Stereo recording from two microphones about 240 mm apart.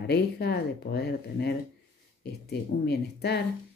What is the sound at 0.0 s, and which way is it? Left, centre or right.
Speech, left.